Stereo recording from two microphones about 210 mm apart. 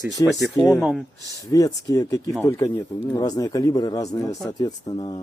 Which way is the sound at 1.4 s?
15° left (ahead or behind).